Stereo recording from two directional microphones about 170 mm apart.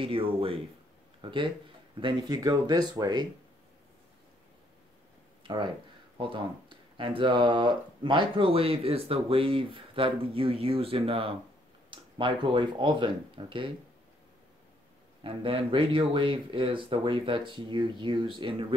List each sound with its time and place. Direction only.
0.0 s speech: 30° right (ahead or behind)
5.4 s speech: 30° right (ahead or behind)
15.2 s speech: 30° right (ahead or behind)